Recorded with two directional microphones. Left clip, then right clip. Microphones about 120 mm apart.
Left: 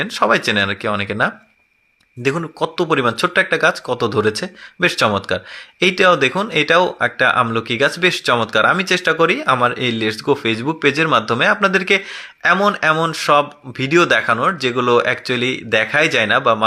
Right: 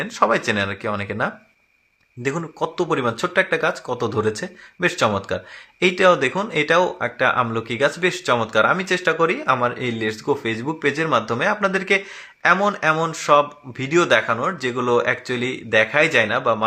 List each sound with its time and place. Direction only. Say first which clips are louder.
0.0 s speech: left 3 dB; 30° left (ahead or behind)